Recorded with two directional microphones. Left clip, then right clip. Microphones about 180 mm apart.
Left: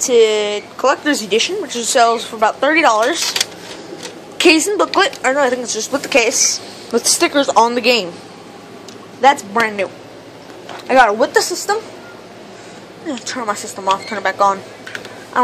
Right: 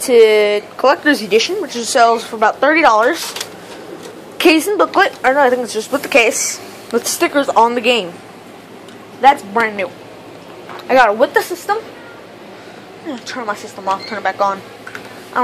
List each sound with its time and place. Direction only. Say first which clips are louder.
0.0 s speech: right 3 dB; 20° right (ahead or behind)
3.4 s a sound: left 7 dB; 50° left (ahead or behind)
4.4 s speech: even; 10° right (ahead or behind)
6.9 s speech: left 1 dB; 5° left (ahead or behind)
9.2 s speech: right 1 dB; 5° left (ahead or behind)
10.9 s speech: even; centre (ahead or behind)
13.1 s a woman's voice: left 1 dB; 15° left (ahead or behind)